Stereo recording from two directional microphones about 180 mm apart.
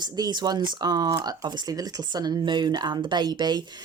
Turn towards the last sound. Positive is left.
turn(degrees=-25)  # may be behind; listen again after turning